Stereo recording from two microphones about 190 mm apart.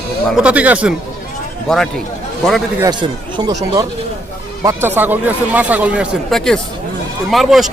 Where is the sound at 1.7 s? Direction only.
5° left (ahead or behind).